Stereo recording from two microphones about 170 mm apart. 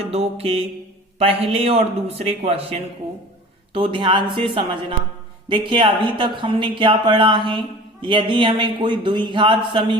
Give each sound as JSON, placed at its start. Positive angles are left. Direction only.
{"t": 0.0, "sound": "a man's voice", "side_deg": -35}